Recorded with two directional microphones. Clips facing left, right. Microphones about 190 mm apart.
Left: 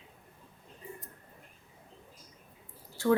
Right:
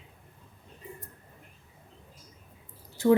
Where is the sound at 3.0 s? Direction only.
20° right (ahead or behind).